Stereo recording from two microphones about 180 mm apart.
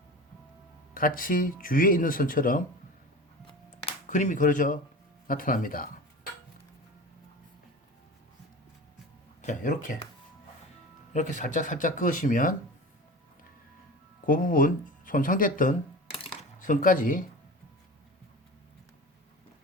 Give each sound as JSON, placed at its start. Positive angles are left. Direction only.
{"t": 0.9, "sound": "speech", "side_deg": 50}
{"t": 3.8, "sound": "speech", "side_deg": 45}
{"t": 9.4, "sound": "speech", "side_deg": 45}
{"t": 11.1, "sound": "speech", "side_deg": 45}
{"t": 14.3, "sound": "speech", "side_deg": 50}